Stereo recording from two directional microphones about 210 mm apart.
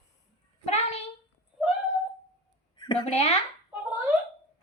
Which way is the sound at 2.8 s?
20° left (ahead or behind).